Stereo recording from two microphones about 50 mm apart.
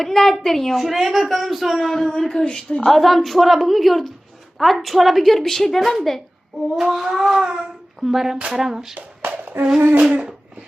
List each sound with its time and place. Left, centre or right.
0.0 s a woman's voice: centre
2.8 s a woman's voice: centre
6.7 s speech: centre
9.0 s a sound: right
10.0 s dog: right